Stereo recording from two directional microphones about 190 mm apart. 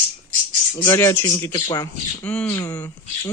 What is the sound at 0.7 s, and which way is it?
Speech, 15° left (ahead or behind).